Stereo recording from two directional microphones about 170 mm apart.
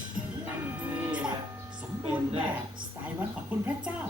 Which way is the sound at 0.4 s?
5° right (ahead or behind).